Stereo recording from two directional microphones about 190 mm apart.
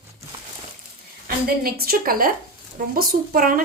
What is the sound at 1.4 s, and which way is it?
A woman's voice, 50° right (ahead or behind).